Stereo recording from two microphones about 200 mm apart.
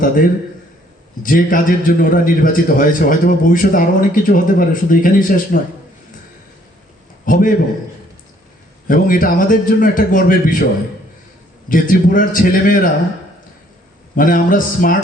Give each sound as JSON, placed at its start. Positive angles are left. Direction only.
{"t": 0.0, "sound": "a man's voice", "side_deg": 45}
{"t": 7.3, "sound": "a man's voice", "side_deg": 45}
{"t": 8.9, "sound": "a man's voice", "side_deg": 45}
{"t": 11.7, "sound": "a man's voice", "side_deg": 45}
{"t": 14.2, "sound": "a man's voice", "side_deg": 45}